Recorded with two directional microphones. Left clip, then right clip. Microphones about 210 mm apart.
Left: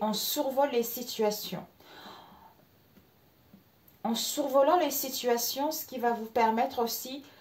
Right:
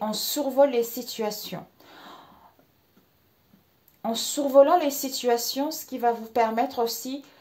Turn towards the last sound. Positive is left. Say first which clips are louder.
# right 3 dB
turn(degrees=-30)  # may be behind; listen again after turning